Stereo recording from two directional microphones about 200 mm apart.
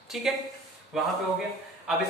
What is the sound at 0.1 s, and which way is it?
A man's voice, centre (ahead or behind).